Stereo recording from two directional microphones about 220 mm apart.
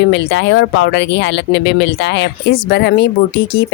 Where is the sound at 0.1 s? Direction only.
55° left (ahead or behind).